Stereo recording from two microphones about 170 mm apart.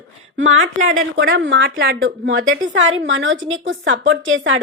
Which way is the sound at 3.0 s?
90° right.